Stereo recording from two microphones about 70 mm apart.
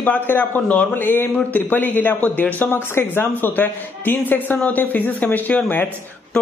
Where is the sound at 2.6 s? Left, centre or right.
Left.